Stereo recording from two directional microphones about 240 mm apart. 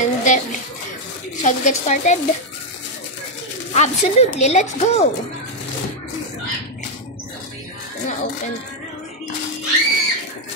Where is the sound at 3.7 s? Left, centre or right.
Left.